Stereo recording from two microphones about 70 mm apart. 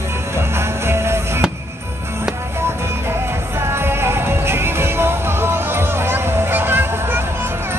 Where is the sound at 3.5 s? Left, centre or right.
Right.